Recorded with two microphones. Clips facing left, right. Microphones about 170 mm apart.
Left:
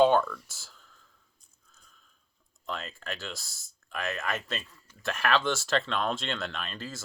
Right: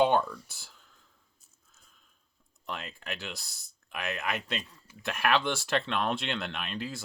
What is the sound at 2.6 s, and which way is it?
Speech, 15° right (ahead or behind).